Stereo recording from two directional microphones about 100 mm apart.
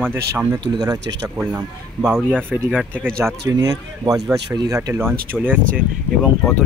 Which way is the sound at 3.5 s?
35° right (ahead or behind).